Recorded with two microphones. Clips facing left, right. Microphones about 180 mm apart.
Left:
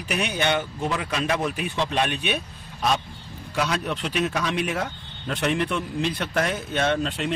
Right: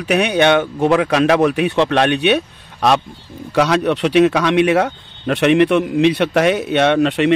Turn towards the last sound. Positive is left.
turn(degrees=-75)  # may be behind; listen again after turning